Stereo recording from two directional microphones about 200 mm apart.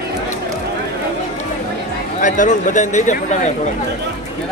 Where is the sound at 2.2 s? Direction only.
40° left (ahead or behind).